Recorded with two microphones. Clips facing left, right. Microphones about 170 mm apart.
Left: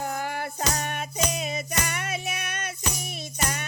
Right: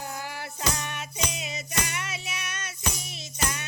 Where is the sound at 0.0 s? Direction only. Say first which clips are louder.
Left 6 dB; 55° left (ahead or behind).